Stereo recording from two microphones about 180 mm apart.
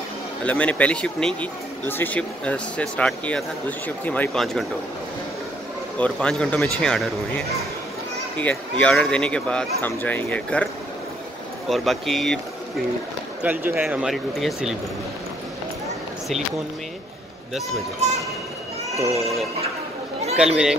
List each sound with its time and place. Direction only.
0.5 s speech: 10° left (ahead or behind)
5.9 s speech: 5° left (ahead or behind)
11.7 s speech: centre (ahead or behind)
13.4 s speech: 10° right (ahead or behind)
20.3 s speech: 5° right (ahead or behind)